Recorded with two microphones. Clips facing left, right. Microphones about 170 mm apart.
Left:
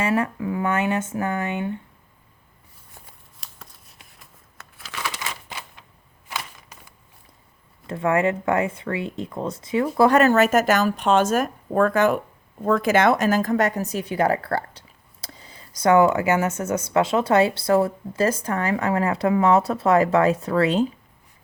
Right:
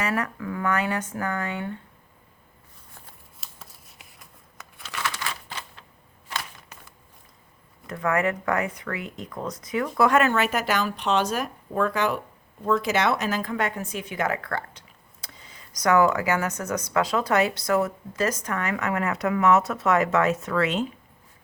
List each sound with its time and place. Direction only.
0.0 s speech: 25° left (ahead or behind)
3.4 s shuffling cards: 5° right (ahead or behind)
4.8 s crumpling: centre (ahead or behind)
5.0 s a sound: 15° left (ahead or behind)
7.9 s a woman's voice: 25° left (ahead or behind)